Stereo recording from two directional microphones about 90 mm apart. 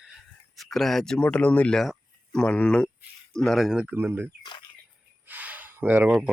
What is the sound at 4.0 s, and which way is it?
Speech, 25° right (ahead or behind).